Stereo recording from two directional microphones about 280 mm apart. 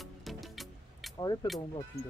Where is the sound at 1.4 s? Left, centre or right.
Centre.